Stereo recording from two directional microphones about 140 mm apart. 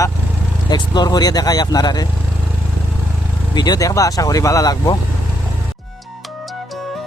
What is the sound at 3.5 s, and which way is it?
Speech, 30° left (ahead or behind).